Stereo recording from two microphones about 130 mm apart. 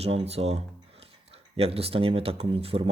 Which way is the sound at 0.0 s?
50° right (ahead or behind).